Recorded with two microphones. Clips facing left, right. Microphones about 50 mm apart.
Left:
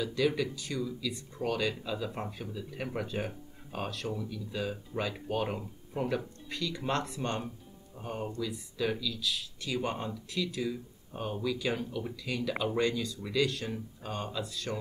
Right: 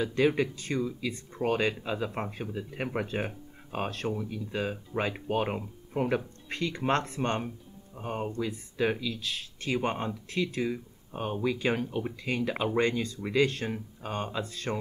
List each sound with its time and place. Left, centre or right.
0.0 s speech: right